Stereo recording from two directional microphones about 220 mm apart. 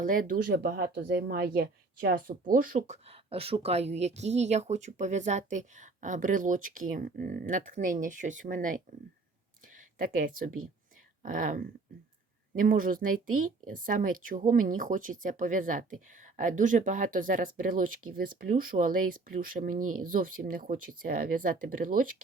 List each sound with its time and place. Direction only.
0.0 s speech: 40° right (ahead or behind)
10.0 s speech: 40° right (ahead or behind)